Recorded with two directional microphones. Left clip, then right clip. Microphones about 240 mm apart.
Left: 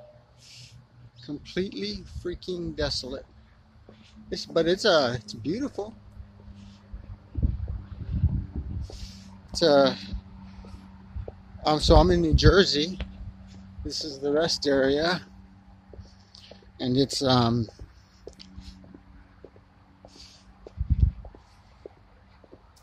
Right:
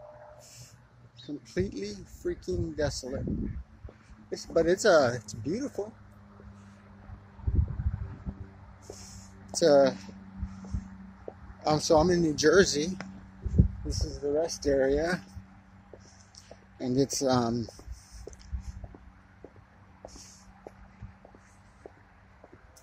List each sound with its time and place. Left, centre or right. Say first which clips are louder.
1.2 s speech: left 2 dB; centre
4.3 s speech: left 1 dB; centre
8.9 s a sound: left 2 dB; centre
11.6 s speech: left 4 dB; centre
13.8 s speech: left 5 dB; centre
14.1 s speech: left 4 dB; left
14.4 s speech: left 3 dB; centre
16.4 s speech: left 4 dB; centre
18.2 s squish: left 4 dB; centre